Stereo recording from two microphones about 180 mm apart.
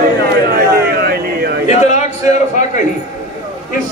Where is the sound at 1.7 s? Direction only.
40° left (ahead or behind).